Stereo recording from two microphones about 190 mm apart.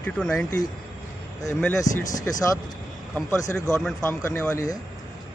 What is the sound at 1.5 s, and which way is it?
Speech, 15° left (ahead or behind).